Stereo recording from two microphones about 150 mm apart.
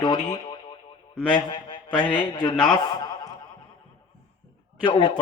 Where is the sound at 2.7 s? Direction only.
25° left (ahead or behind).